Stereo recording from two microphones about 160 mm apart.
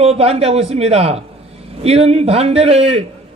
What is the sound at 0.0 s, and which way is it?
A man's voice, 40° right (ahead or behind).